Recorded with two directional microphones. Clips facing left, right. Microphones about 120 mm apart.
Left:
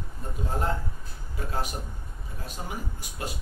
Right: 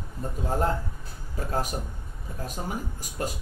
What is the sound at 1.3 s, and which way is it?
Speech, 40° right (ahead or behind).